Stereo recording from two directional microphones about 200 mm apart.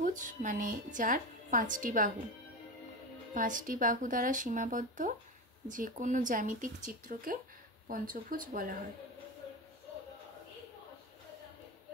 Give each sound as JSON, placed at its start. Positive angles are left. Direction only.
{"t": 0.0, "sound": "a woman's voice", "side_deg": -40}
{"t": 3.3, "sound": "a woman's voice", "side_deg": -40}